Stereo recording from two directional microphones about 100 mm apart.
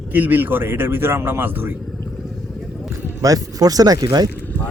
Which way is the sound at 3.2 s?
35° right (ahead or behind).